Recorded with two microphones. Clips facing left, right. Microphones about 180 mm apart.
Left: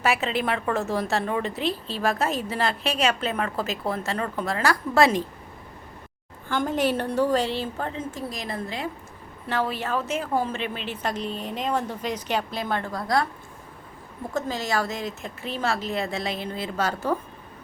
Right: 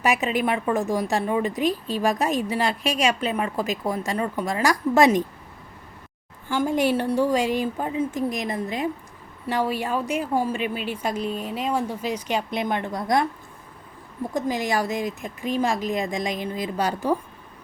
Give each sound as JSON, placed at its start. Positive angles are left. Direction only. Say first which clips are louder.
{"t": 0.0, "sound": "a woman's voice", "louder": "right 2 dB", "side_deg": -15}
{"t": 6.5, "sound": "a woman's voice", "louder": "right 2 dB", "side_deg": -10}
{"t": 14.3, "sound": "a woman's voice", "louder": "right 2 dB", "side_deg": -15}